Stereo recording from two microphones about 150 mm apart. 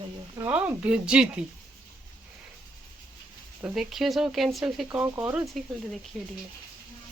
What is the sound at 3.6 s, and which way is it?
Speech, centre (ahead or behind).